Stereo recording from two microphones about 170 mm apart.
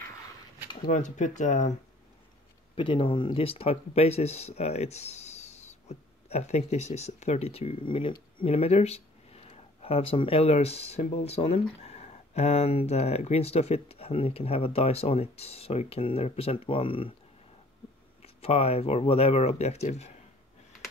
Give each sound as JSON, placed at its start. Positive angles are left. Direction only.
{"t": 0.8, "sound": "speech", "side_deg": 45}
{"t": 2.7, "sound": "speech", "side_deg": 30}
{"t": 18.2, "sound": "speech", "side_deg": 35}